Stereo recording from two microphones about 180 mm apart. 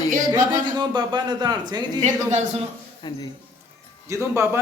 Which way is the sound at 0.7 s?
25° right (ahead or behind).